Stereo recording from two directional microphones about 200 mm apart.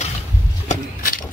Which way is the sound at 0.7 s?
45° left (ahead or behind).